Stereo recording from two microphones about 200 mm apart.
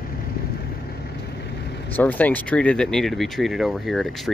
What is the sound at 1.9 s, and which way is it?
Speech, 10° left (ahead or behind).